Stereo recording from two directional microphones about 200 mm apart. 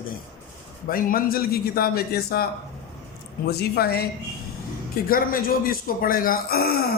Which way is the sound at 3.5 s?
50° left (ahead or behind).